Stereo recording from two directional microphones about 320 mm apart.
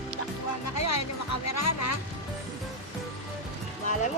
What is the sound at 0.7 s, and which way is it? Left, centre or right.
Music, left.